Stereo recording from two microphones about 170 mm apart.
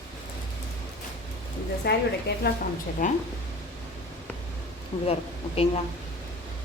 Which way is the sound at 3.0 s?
50° left (ahead or behind).